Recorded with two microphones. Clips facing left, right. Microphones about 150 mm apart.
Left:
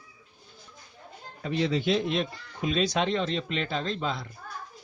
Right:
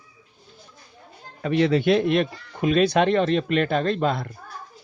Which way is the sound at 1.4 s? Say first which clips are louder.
Right 7 dB; 70° right (ahead or behind).